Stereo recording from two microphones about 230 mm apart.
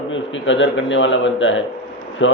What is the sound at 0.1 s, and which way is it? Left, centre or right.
A man's voice, left.